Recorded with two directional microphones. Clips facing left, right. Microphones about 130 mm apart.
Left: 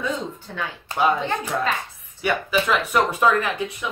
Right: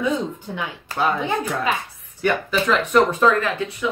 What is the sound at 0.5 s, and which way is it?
Speech, 10° right (ahead or behind).